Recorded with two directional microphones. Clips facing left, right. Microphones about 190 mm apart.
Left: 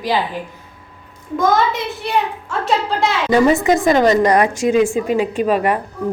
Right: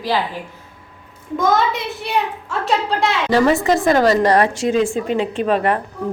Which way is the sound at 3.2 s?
20° left (ahead or behind).